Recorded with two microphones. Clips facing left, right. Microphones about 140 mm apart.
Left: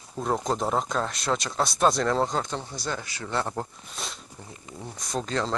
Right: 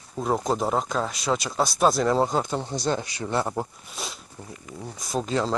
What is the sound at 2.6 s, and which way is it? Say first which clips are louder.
Speech: right 7 dB; 25° right (ahead or behind).